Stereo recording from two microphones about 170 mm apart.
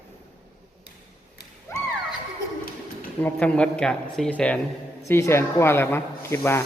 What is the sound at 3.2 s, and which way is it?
Speech, 5° left (ahead or behind).